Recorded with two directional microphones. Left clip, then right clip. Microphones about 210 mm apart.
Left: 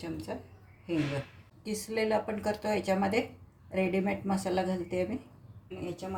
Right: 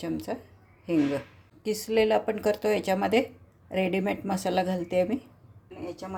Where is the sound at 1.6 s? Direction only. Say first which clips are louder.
Right 7 dB; 45° right (ahead or behind).